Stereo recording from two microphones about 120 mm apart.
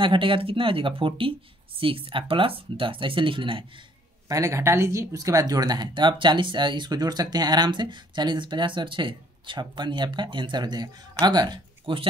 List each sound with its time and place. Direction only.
0.0 s speech: 45° right (ahead or behind)
4.3 s speech: 25° right (ahead or behind); by 12.1 s 45° right (ahead or behind)